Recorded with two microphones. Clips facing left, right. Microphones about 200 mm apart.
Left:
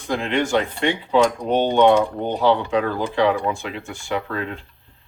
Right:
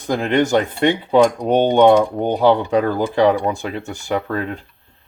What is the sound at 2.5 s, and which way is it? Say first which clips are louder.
Speech: right 2 dB; 40° right (ahead or behind).